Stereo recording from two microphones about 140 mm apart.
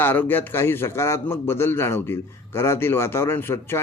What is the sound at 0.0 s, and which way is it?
A man's voice, 15° left (ahead or behind).